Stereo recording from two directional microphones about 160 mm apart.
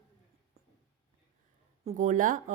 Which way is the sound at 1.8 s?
55° right (ahead or behind).